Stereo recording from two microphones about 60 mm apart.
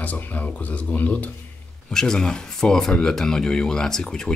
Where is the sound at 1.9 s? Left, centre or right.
Centre.